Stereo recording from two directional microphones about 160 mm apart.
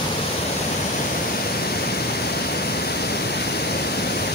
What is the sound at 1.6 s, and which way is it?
Waterfall, 80° left.